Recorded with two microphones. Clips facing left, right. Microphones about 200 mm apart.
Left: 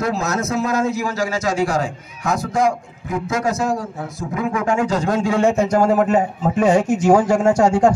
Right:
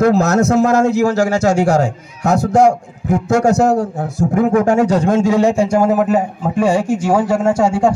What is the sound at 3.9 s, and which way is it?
A man's voice, 50° right (ahead or behind).